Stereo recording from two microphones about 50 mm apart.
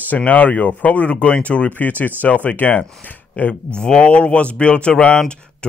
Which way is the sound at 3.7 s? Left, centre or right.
Centre.